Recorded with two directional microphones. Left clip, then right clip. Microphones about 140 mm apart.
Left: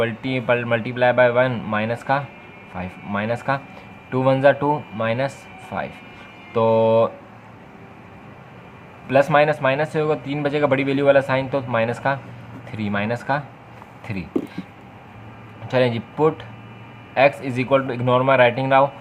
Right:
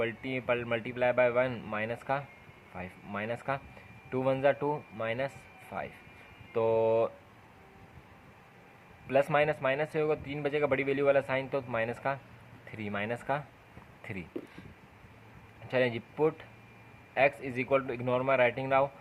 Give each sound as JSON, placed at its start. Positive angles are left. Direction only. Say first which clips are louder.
{"t": 0.0, "sound": "speech", "louder": "left 11 dB", "side_deg": -30}
{"t": 9.0, "sound": "speech", "louder": "left 11 dB", "side_deg": -35}
{"t": 15.6, "sound": "speech", "louder": "left 10 dB", "side_deg": -35}